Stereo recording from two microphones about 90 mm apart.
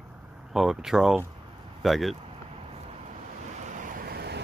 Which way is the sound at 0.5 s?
5° right (ahead or behind).